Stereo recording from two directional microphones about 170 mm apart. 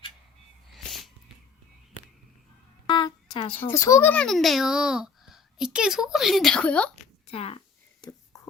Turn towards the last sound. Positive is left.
turn(degrees=35)  # may be behind; listen again after turning